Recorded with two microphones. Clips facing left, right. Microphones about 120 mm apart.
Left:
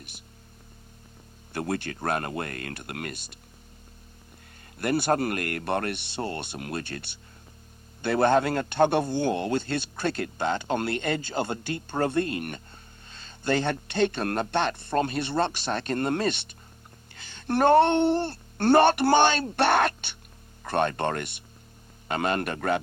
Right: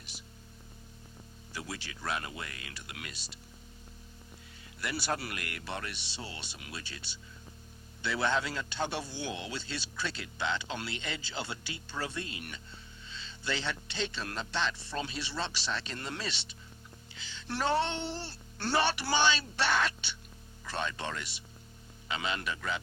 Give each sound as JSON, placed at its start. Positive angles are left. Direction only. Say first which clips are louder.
{"t": 1.5, "sound": "a man's voice", "louder": "left 12 dB", "side_deg": 55}
{"t": 4.8, "sound": "a man's voice", "louder": "left 11 dB", "side_deg": 50}